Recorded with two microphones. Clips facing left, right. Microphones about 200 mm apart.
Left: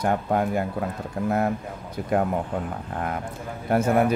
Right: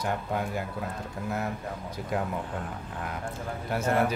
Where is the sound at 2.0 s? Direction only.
55° left (ahead or behind).